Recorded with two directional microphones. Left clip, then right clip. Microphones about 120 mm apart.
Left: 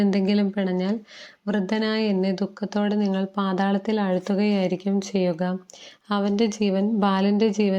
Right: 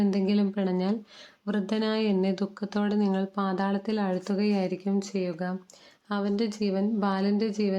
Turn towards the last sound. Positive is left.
turn(degrees=20)  # may be behind; listen again after turning